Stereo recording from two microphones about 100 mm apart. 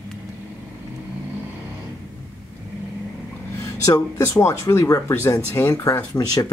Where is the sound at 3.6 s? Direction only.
35° left (ahead or behind).